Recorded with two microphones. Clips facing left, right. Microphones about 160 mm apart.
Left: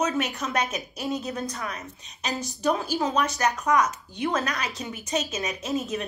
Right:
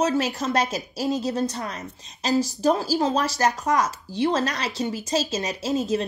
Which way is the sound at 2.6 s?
35° right (ahead or behind).